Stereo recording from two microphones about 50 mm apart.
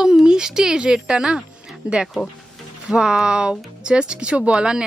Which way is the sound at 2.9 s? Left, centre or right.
Centre.